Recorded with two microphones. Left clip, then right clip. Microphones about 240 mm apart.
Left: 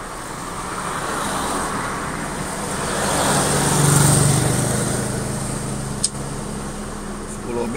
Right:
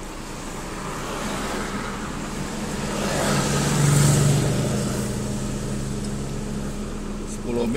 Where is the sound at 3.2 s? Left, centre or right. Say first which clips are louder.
Left 4 dB; left.